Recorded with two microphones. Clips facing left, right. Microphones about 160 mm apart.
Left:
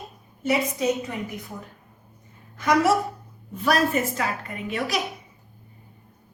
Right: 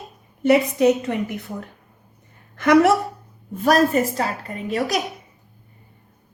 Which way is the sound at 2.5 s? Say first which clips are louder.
Right 5 dB; 65° right (ahead or behind).